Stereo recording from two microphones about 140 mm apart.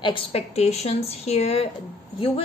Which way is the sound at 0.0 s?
40° left (ahead or behind).